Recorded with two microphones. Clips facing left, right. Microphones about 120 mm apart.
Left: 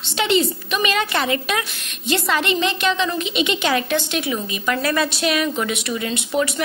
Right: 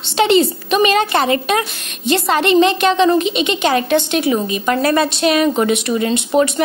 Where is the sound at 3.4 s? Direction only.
45° right (ahead or behind); by 6.6 s 30° right (ahead or behind).